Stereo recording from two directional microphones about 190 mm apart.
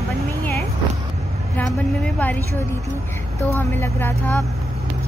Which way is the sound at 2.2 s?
10° left (ahead or behind).